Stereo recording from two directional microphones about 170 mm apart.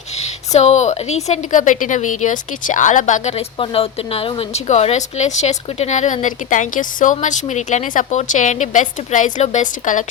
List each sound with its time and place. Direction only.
0.2 s a woman's voice: 40° left (ahead or behind)